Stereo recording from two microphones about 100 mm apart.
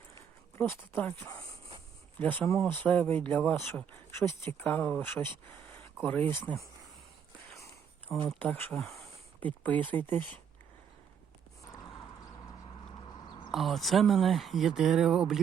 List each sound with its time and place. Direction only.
0.1 s a sound: 25° left (ahead or behind)
2.1 s speech: 20° left (ahead or behind)
8.4 s speech: 20° left (ahead or behind)
13.5 s speech: centre (ahead or behind)